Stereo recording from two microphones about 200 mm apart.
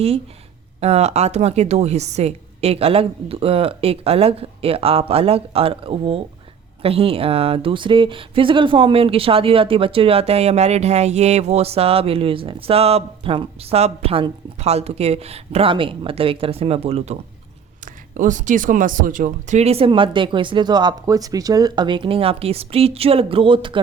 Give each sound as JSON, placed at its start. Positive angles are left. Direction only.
{"t": 0.8, "sound": "speech", "side_deg": -30}
{"t": 17.8, "sound": "speech", "side_deg": -40}